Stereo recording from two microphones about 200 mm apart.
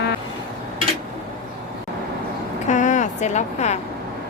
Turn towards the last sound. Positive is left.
turn(degrees=35)  # may be behind; listen again after turning